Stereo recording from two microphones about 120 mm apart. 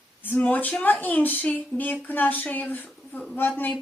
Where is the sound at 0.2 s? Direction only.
15° left (ahead or behind).